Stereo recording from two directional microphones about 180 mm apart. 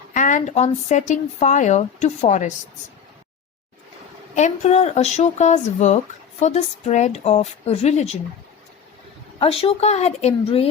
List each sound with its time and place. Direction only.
0.1 s speech: 45° left (ahead or behind)
4.4 s speech: 40° left (ahead or behind)
9.4 s speech: 30° left (ahead or behind)